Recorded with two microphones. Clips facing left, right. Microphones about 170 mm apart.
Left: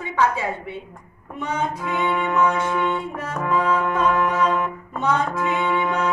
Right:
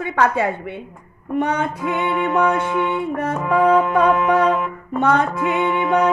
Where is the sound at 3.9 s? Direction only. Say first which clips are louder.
Right 5 dB; 60° right (ahead or behind).